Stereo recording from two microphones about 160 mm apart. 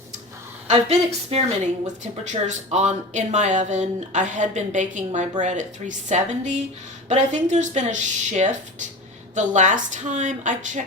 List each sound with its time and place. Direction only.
0.7 s a woman's voice: 40° right (ahead or behind)